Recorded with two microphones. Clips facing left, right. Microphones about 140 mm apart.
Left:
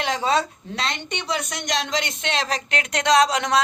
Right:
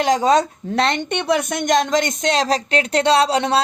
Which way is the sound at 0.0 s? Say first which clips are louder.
Right 7 dB; 40° right (ahead or behind).